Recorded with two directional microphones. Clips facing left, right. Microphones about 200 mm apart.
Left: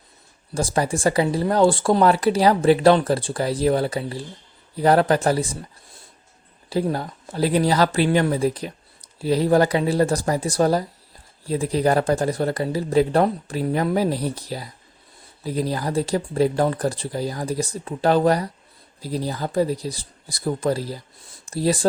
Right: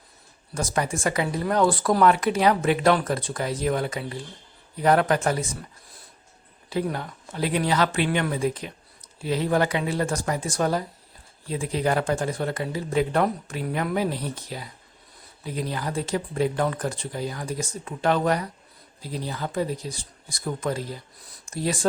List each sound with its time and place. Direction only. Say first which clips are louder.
0.5 s speech: left 4 dB; 30° left (ahead or behind)
6.7 s speech: left 4 dB; 35° left (ahead or behind)